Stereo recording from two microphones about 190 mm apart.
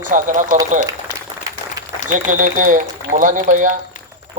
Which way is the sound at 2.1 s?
40° right (ahead or behind).